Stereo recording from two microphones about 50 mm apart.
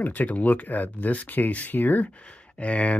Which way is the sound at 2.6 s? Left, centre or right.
Left.